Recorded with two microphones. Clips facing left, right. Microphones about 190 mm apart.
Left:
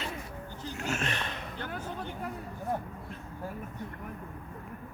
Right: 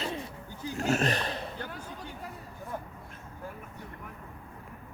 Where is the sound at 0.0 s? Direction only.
30° right (ahead or behind).